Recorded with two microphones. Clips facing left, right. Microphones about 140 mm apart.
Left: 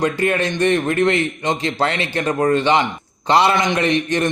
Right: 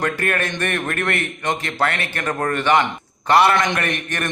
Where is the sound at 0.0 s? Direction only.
20° left (ahead or behind).